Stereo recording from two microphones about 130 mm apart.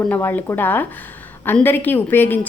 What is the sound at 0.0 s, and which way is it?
A woman's voice, 15° left (ahead or behind).